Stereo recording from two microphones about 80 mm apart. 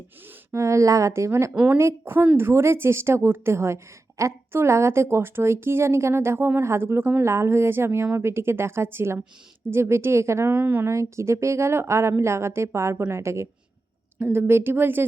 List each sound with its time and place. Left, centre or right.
0.5 s a woman's voice: right
1.5 s speech: right
1.8 s a woman's voice: right
10.5 s speech: right
10.8 s a woman's voice: right